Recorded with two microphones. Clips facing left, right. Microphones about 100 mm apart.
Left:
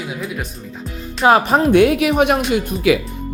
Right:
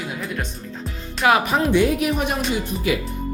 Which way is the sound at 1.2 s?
35° left (ahead or behind).